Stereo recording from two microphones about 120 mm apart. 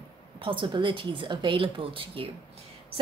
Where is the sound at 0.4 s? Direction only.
45° right (ahead or behind).